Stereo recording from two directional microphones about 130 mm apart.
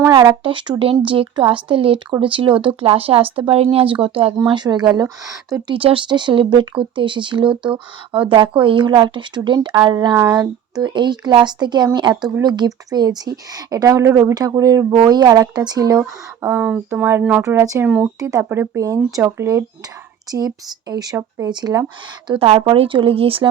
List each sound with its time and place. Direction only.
0.0 s speech: 30° right (ahead or behind)
0.8 s speech: 45° right (ahead or behind)
4.4 s a woman's voice: 35° right (ahead or behind)
5.6 s a woman's voice: 40° right (ahead or behind); by 10.5 s 25° right (ahead or behind)
10.8 s a woman's voice: 35° right (ahead or behind)
16.4 s a woman's voice: 15° right (ahead or behind); by 21.8 s 30° right (ahead or behind)
22.3 s speech: 50° right (ahead or behind)